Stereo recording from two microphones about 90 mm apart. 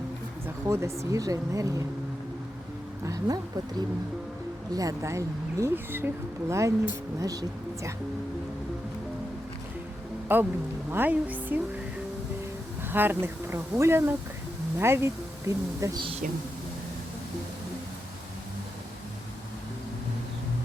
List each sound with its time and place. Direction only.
0.4 s speech: 30° right (ahead or behind)
3.0 s speech: 40° right (ahead or behind); by 6.1 s 25° right (ahead or behind)
6.5 s speech: 35° right (ahead or behind)
10.3 s speech: 25° right (ahead or behind)
12.9 s speech: 20° right (ahead or behind)